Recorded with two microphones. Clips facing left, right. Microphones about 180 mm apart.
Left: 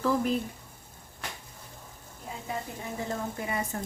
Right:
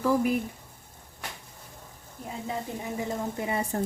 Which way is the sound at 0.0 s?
10° right (ahead or behind).